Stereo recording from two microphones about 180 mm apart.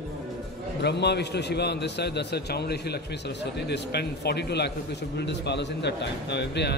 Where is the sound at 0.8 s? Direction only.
70° left (ahead or behind).